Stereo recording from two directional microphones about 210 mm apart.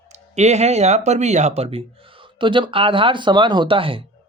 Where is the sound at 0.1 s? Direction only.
30° right (ahead or behind).